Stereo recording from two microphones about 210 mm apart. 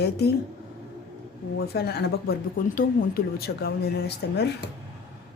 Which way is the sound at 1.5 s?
50° left (ahead or behind).